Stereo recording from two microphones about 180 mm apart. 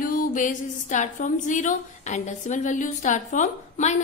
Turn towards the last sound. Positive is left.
turn(degrees=40)  # may be behind; listen again after turning